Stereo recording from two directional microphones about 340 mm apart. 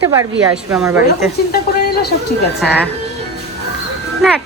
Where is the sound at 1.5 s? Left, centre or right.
Left.